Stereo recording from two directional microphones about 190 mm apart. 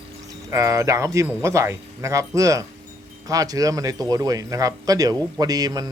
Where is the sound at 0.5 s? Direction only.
15° right (ahead or behind).